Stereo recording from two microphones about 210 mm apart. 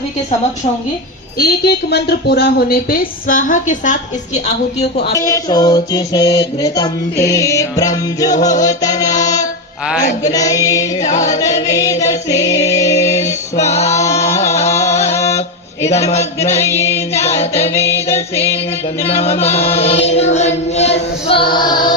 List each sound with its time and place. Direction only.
1.4 s a woman's voice: 50° left (ahead or behind)
5.1 s music: 15° left (ahead or behind)
9.2 s a sound: 15° left (ahead or behind)
10.0 s female singing: 35° left (ahead or behind)
10.3 s music: 15° left (ahead or behind)
11.1 s female singing: 35° left (ahead or behind)
11.3 s music: 15° left (ahead or behind)
13.6 s female singing: 30° left (ahead or behind)
14.5 s music: 30° left (ahead or behind)
15.0 s mantra: 15° left (ahead or behind)
16.0 s chant: 30° left (ahead or behind)
16.5 s child singing: 10° left (ahead or behind)
17.7 s music: 10° left (ahead or behind)
19.1 s chant: 30° left (ahead or behind)